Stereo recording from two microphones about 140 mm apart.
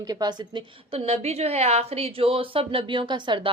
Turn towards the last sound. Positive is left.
turn(degrees=-35)  # may be behind; listen again after turning